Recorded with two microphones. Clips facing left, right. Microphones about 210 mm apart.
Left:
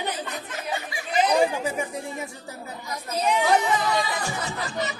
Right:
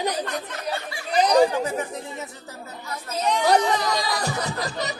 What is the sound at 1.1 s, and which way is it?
Chatter, 40° right (ahead or behind).